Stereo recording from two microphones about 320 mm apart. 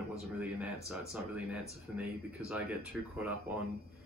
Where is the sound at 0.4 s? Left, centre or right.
Centre.